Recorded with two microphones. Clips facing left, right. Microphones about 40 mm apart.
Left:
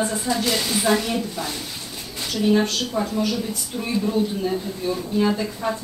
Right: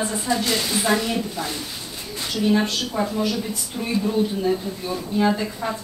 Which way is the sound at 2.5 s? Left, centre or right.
Centre.